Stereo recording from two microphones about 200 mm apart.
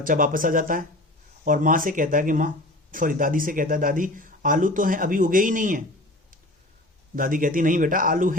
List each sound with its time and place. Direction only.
0.0 s speech: 45° right (ahead or behind)
7.2 s speech: 45° right (ahead or behind)